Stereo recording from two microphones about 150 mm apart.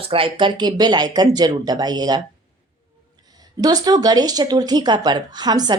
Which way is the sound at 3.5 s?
25° right (ahead or behind).